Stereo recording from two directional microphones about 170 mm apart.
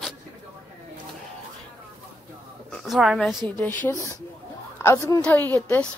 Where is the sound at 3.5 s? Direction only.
10° left (ahead or behind).